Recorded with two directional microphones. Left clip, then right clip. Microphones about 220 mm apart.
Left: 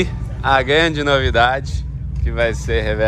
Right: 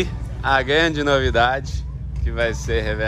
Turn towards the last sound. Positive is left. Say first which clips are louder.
# left 3 dB
turn(degrees=-10)  # may be behind; listen again after turning